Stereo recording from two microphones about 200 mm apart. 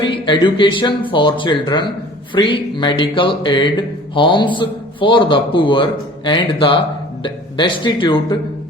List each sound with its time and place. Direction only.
0.0 s a man's voice: 25° left (ahead or behind)